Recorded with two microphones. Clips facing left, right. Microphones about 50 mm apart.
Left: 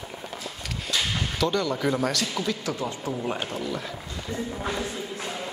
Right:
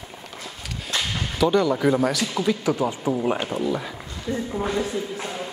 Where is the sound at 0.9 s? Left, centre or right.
Right.